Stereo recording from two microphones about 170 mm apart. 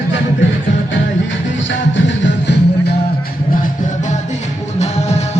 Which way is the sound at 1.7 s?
90° left.